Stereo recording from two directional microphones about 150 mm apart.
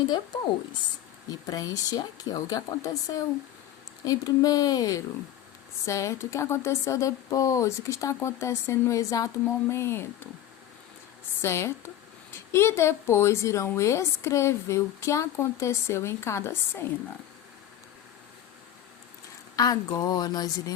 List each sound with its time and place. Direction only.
1.3 s a woman's voice: 25° left (ahead or behind)
11.4 s a woman's voice: 15° left (ahead or behind)
19.5 s a woman's voice: 25° left (ahead or behind)